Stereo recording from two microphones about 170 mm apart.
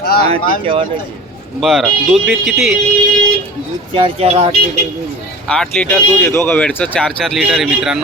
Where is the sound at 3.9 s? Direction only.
35° right (ahead or behind).